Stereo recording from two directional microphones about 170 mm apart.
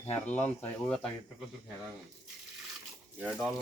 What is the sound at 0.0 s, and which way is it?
Speech, 10° left (ahead or behind).